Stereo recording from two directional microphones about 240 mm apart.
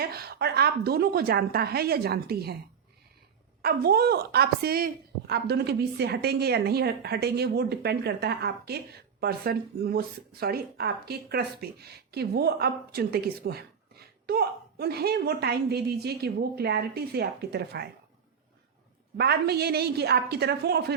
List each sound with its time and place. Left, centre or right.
0.0 s speech: right
3.6 s a woman's voice: right
19.1 s a woman's voice: right